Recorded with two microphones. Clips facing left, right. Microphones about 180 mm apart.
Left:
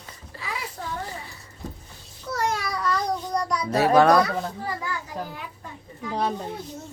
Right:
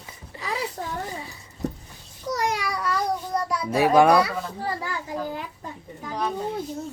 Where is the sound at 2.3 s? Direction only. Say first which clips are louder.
Right 1 dB; 15° right (ahead or behind).